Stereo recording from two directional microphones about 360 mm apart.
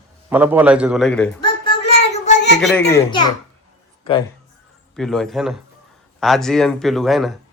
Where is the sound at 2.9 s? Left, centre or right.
Centre.